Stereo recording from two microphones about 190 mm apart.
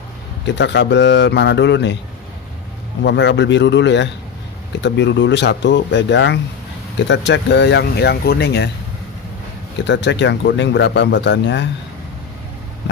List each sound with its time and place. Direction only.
0.4 s a man's voice: 65° left (ahead or behind)
3.0 s a man's voice: 65° left (ahead or behind)
9.8 s a man's voice: 70° left (ahead or behind)